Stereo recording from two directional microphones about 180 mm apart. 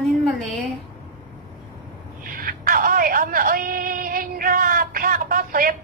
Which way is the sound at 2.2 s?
50° right (ahead or behind).